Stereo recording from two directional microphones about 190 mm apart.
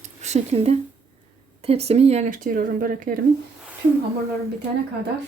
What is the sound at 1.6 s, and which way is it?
Speech, 35° right (ahead or behind).